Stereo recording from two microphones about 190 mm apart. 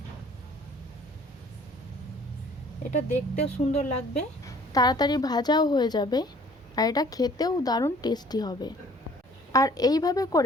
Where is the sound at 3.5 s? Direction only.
35° left (ahead or behind).